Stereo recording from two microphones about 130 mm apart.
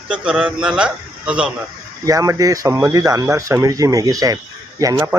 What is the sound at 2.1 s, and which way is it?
Speech, 25° right (ahead or behind).